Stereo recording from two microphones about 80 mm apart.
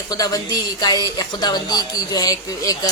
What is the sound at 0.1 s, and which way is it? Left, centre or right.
A woman's voice, left.